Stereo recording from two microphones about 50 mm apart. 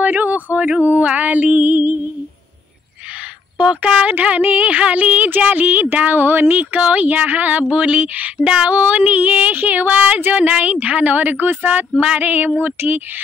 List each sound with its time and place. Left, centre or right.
0.0 s speech: right
3.5 s speech: right
4.1 s speech: right
6.6 s speech: right
8.4 s speech: centre; by 13.0 s right